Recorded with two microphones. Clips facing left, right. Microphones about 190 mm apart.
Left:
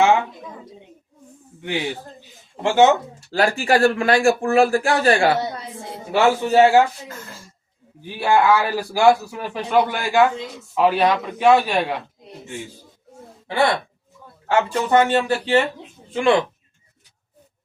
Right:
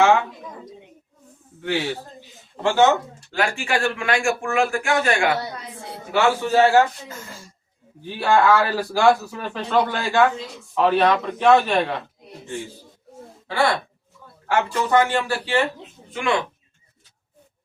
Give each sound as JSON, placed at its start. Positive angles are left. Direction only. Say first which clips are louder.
{"t": 1.6, "sound": "speech", "louder": "right 1 dB", "side_deg": 15}
{"t": 3.3, "sound": "speech", "louder": "left 5 dB", "side_deg": 35}
{"t": 8.0, "sound": "speech", "louder": "even", "side_deg": 10}
{"t": 14.4, "sound": "speech", "louder": "left 2 dB", "side_deg": 25}